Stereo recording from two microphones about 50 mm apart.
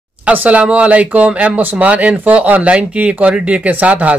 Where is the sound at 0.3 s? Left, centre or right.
Right.